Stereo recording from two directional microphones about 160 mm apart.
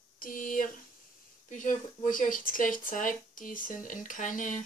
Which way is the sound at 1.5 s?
50° left (ahead or behind).